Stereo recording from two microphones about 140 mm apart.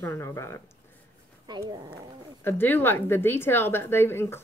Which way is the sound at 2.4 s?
15° left (ahead or behind).